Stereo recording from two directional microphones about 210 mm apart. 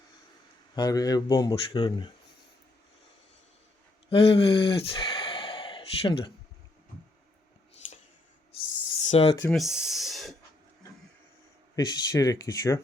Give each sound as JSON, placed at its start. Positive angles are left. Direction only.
{"t": 0.8, "sound": "speech", "side_deg": 20}
{"t": 4.1, "sound": "a sound", "side_deg": 25}
{"t": 9.0, "sound": "speech", "side_deg": 30}
{"t": 9.4, "sound": "speech", "side_deg": 0}
{"t": 11.8, "sound": "speech", "side_deg": 20}